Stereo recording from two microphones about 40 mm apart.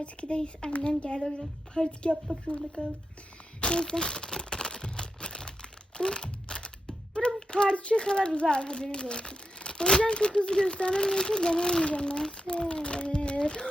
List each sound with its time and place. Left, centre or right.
0.0 s speech: left
3.6 s crumpling: left
6.0 s a sound: left
10.0 s a child's voice: left